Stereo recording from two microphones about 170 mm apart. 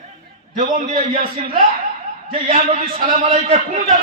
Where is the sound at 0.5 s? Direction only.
50° right (ahead or behind).